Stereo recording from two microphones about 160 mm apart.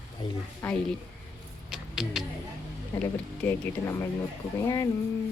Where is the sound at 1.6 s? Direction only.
5° right (ahead or behind).